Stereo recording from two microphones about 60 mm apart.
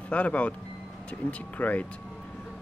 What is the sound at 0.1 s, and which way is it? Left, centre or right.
Speech, left.